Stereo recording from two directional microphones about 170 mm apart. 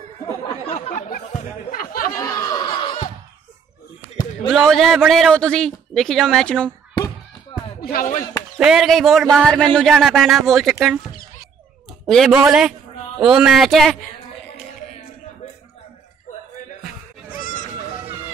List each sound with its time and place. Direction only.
0.9 s speech: 50° left (ahead or behind)
2.1 s snicker: 20° left (ahead or behind)
4.5 s speech: centre (ahead or behind)
7.8 s speech: 60° left (ahead or behind)
8.5 s speech: 5° right (ahead or behind)
12.1 s speech: centre (ahead or behind)